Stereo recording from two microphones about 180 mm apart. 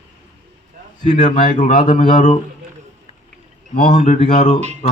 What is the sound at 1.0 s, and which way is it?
Speech, 40° left (ahead or behind).